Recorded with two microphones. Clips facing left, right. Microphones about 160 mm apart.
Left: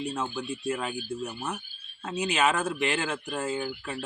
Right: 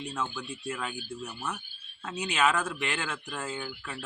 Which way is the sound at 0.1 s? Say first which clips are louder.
Left 3 dB; 30° left (ahead or behind).